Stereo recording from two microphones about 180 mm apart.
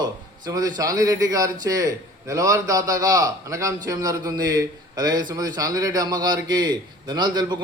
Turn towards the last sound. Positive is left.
turn(degrees=-25)  # may be behind; listen again after turning